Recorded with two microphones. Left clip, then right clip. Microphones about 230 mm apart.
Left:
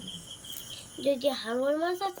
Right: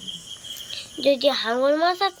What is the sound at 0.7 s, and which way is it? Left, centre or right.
Speech, centre.